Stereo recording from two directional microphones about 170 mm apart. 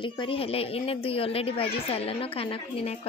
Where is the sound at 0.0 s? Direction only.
30° left (ahead or behind).